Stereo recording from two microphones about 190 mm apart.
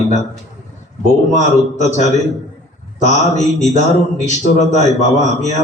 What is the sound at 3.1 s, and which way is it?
Speech, 40° left (ahead or behind).